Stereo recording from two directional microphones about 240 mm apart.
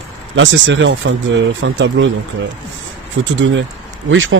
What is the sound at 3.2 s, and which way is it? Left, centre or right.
Speech, right.